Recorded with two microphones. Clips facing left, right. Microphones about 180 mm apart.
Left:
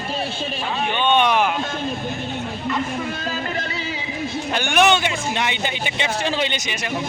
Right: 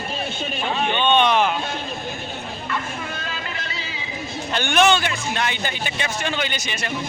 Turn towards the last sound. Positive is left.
turn(degrees=15)  # may be behind; listen again after turning